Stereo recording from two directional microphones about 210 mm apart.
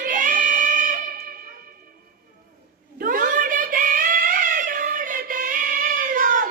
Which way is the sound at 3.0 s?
40° right (ahead or behind).